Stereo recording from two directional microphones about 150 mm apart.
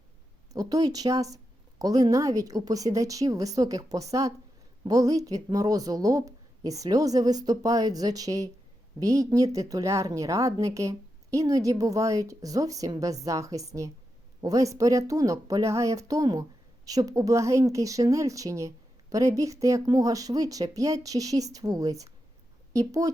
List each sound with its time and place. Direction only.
0.5 s a woman's voice: 25° right (ahead or behind)